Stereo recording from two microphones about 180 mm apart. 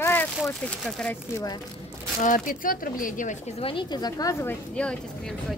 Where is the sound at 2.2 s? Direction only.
45° left (ahead or behind).